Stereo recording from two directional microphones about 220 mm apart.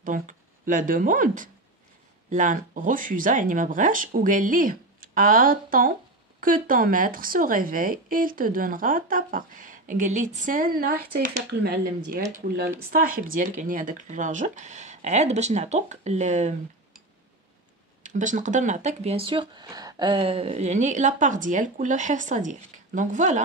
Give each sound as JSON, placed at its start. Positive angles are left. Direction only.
{"t": 0.0, "sound": "speech", "side_deg": -35}
{"t": 18.0, "sound": "speech", "side_deg": -35}